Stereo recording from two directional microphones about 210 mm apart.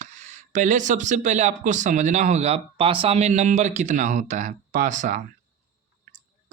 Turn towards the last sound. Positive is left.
turn(degrees=-35)  # may be behind; listen again after turning